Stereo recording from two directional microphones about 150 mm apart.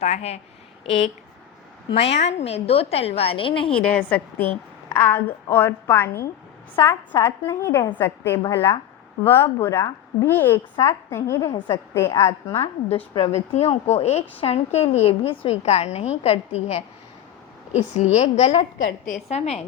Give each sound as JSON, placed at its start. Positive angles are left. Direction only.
{"t": 0.0, "sound": "a woman's voice", "side_deg": 45}
{"t": 1.9, "sound": "a woman's voice", "side_deg": 45}
{"t": 3.8, "sound": "a woman's voice", "side_deg": 10}
{"t": 12.9, "sound": "a woman's voice", "side_deg": 40}
{"t": 18.9, "sound": "a woman's voice", "side_deg": 60}